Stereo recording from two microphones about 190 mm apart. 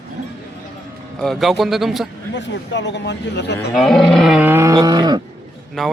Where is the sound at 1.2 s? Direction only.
Centre (ahead or behind).